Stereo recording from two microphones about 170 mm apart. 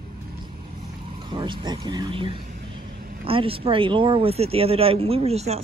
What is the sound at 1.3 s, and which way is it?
A woman's voice, 30° right (ahead or behind).